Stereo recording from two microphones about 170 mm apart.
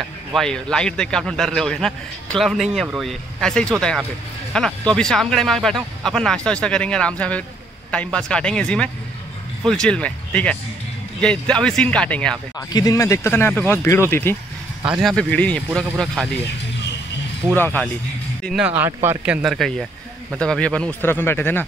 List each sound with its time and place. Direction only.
0.3 s a man's voice: 5° left (ahead or behind)
12.5 s speech: 20° left (ahead or behind)
14.9 s a man's voice: centre (ahead or behind)
17.6 s speech: 10° left (ahead or behind)
18.4 s a man's voice: 5° right (ahead or behind); by 21.6 s 10° left (ahead or behind)